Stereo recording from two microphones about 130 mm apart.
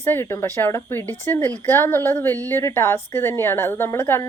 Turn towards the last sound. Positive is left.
turn(degrees=20)  # may be behind; listen again after turning